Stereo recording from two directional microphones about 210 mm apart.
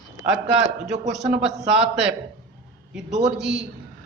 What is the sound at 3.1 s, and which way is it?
Speech, 35° right (ahead or behind).